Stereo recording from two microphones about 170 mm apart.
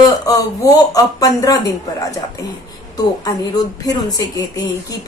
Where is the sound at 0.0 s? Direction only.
20° left (ahead or behind).